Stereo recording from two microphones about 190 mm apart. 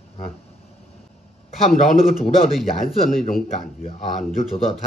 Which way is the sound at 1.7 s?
50° left (ahead or behind).